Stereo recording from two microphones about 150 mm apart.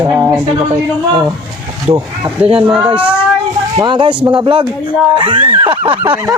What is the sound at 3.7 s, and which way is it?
Speech, 30° right (ahead or behind).